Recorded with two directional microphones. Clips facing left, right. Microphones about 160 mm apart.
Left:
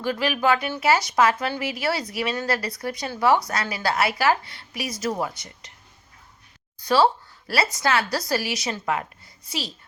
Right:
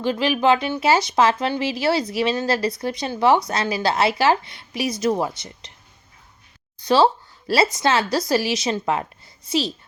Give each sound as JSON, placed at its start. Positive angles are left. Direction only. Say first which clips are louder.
{"t": 0.0, "sound": "speech", "louder": "right 4 dB", "side_deg": -25}
{"t": 6.8, "sound": "speech", "louder": "right 3 dB", "side_deg": -20}